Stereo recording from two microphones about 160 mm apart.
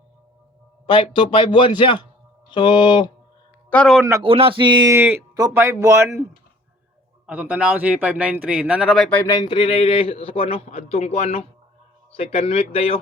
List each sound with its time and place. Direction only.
0.9 s a man's voice: 30° left (ahead or behind)
3.7 s a man's voice: 10° left (ahead or behind)
4.2 s speech: 35° right (ahead or behind)
4.9 s a man's voice: 15° right (ahead or behind)
7.3 s a man's voice: 10° right (ahead or behind); by 9.3 s 10° left (ahead or behind)
9.4 s a man's voice: 35° left (ahead or behind)